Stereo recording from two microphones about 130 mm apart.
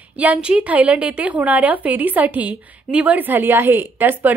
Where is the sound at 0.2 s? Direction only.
10° right (ahead or behind).